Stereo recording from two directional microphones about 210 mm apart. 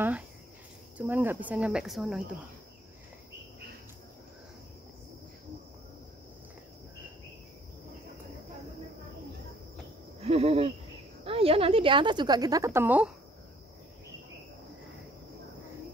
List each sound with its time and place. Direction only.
0.9 s speech: 10° right (ahead or behind)
10.2 s a woman's voice: 30° right (ahead or behind); by 13.1 s 10° right (ahead or behind)